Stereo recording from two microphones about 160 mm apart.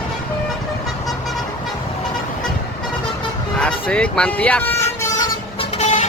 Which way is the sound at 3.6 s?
5° left (ahead or behind).